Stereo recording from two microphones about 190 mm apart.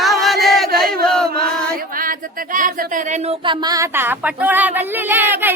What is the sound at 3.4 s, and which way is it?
Speech, 25° right (ahead or behind).